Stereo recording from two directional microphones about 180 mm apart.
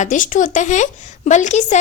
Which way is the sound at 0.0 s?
45° left (ahead or behind).